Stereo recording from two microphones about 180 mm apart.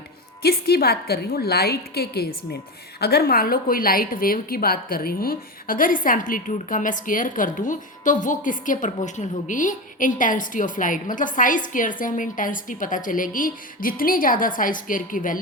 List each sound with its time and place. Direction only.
0.4 s a woman's voice: 60° left (ahead or behind)